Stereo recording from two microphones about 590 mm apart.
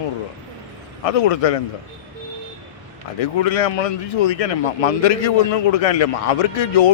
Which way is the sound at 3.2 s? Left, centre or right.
Left.